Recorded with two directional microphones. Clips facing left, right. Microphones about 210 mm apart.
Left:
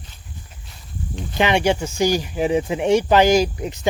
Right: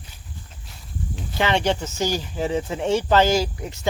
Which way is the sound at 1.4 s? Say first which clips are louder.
Left 3 dB; 15° left (ahead or behind).